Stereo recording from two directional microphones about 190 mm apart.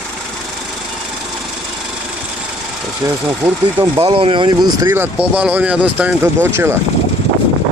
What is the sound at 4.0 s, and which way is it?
Speech, 30° right (ahead or behind).